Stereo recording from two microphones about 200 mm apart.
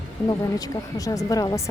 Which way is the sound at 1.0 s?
15° left (ahead or behind).